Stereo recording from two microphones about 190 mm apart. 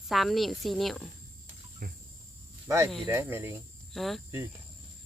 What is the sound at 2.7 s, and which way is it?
Speech, 15° right (ahead or behind).